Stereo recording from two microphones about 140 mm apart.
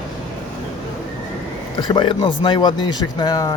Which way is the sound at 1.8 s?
35° left (ahead or behind).